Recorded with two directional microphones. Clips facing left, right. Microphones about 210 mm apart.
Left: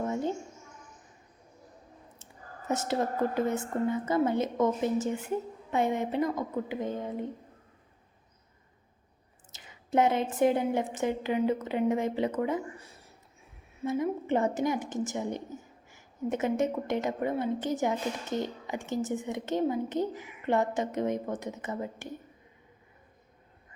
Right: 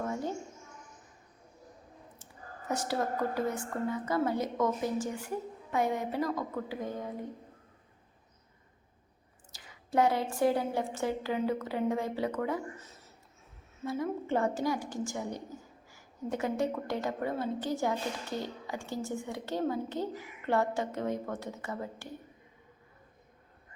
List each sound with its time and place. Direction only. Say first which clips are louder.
0.0 s a sound: left 4 dB; 20° left (ahead or behind)
2.6 s a woman's voice: left 3 dB; 20° left (ahead or behind)
9.5 s a woman's voice: left 5 dB; 20° left (ahead or behind)